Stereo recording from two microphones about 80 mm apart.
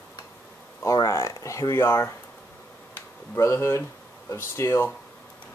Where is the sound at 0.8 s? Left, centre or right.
Left.